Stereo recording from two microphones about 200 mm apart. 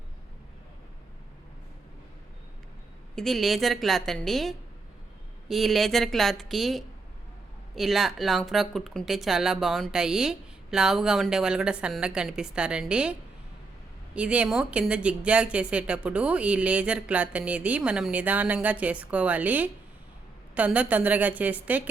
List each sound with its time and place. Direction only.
3.2 s speech: centre (ahead or behind)
14.2 s speech: 5° right (ahead or behind)